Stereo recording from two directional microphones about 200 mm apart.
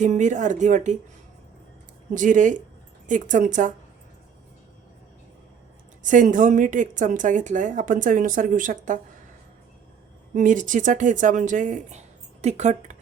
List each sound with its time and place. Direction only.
0.0 s a woman's voice: 35° right (ahead or behind)
2.1 s a woman's voice: 40° right (ahead or behind)
6.0 s a woman's voice: 40° right (ahead or behind)
10.3 s speech: 40° right (ahead or behind)